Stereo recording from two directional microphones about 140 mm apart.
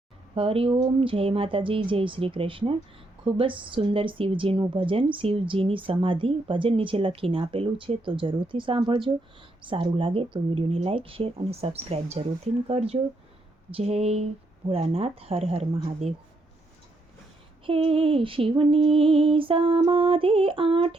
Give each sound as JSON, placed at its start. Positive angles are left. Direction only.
{"t": 0.3, "sound": "a woman's voice", "side_deg": -40}
{"t": 17.7, "sound": "a woman's voice", "side_deg": -40}